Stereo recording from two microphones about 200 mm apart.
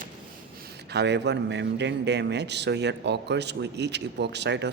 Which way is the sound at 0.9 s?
60° right (ahead or behind).